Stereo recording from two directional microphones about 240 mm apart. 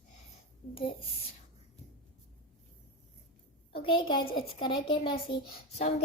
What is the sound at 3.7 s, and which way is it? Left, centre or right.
A child's voice, left.